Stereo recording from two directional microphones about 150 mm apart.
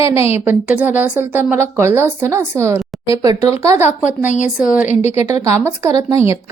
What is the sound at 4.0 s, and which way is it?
A woman's voice, 55° left (ahead or behind).